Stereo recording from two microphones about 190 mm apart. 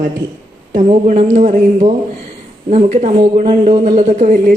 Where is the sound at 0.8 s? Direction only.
40° right (ahead or behind).